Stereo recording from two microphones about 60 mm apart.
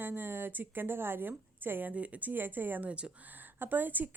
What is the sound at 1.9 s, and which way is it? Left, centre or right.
Speech, right.